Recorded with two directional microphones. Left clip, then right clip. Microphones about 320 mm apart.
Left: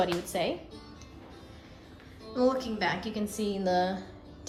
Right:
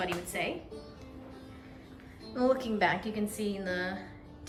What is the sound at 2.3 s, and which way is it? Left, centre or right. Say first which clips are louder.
A woman's voice: left 1 dB; centre.